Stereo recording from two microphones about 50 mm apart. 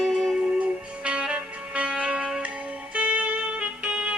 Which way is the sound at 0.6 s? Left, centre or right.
Right.